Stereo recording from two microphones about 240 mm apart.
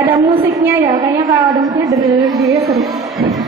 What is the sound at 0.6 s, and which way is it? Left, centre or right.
Speech, centre.